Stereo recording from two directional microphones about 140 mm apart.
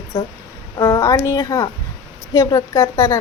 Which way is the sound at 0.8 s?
25° left (ahead or behind).